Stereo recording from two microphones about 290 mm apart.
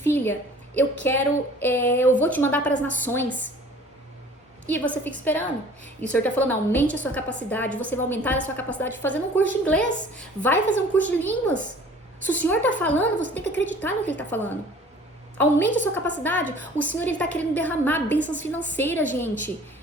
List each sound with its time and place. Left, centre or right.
0.0 s a woman's voice: centre
4.6 s a woman's voice: centre